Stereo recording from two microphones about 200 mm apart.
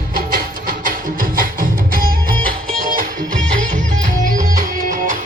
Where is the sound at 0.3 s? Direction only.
45° right (ahead or behind).